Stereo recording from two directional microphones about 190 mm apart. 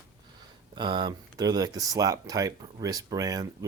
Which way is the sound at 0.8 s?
25° right (ahead or behind).